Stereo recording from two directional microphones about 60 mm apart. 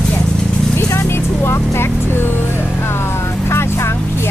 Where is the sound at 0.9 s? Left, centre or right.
Left.